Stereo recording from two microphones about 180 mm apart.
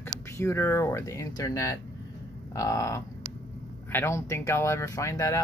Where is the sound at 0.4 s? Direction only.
15° left (ahead or behind).